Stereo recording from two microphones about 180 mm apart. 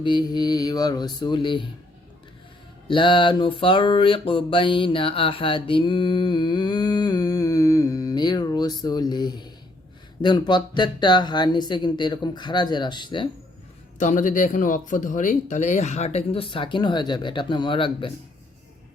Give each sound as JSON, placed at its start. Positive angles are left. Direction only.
{"t": 0.0, "sound": "speech", "side_deg": 25}
{"t": 2.8, "sound": "a sound", "side_deg": 25}
{"t": 10.2, "sound": "speech", "side_deg": 25}
{"t": 14.0, "sound": "speech", "side_deg": 45}